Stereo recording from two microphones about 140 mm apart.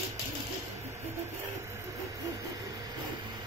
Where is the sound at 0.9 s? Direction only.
20° right (ahead or behind).